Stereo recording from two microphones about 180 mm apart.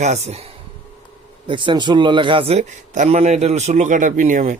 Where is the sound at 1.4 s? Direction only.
25° right (ahead or behind).